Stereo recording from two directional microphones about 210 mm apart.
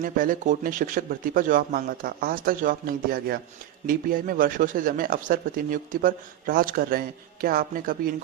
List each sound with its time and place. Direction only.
0.0 s a man's voice: 40° right (ahead or behind)